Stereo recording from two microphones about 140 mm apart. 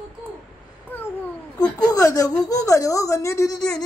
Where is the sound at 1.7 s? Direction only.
25° left (ahead or behind).